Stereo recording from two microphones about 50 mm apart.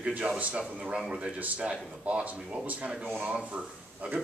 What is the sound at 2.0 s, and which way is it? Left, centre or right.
Speech, right.